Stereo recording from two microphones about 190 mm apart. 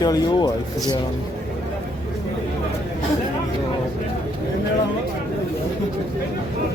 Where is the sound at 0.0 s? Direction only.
20° left (ahead or behind).